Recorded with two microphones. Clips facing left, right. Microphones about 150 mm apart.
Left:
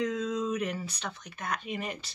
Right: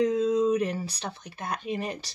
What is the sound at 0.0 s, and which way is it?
Speech, 35° right (ahead or behind).